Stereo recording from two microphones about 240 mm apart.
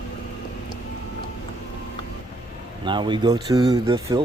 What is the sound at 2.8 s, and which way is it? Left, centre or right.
Speech, centre.